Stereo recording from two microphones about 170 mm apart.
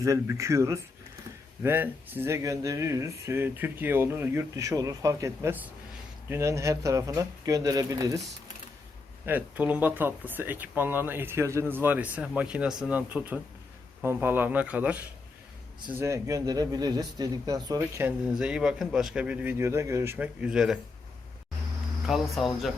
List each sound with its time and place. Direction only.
0.0 s speech: 20° right (ahead or behind)
9.2 s speech: 10° right (ahead or behind)
18.3 s speech: 5° right (ahead or behind)
22.0 s speech: centre (ahead or behind)